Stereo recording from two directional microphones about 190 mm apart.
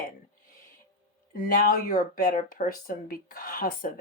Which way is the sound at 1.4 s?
50° left (ahead or behind).